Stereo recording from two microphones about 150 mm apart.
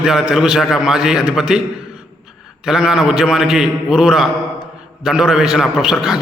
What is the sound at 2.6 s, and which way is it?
A man's voice, 5° right (ahead or behind).